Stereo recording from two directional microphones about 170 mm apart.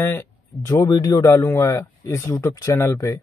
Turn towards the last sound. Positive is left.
turn(degrees=15)  # may be behind; listen again after turning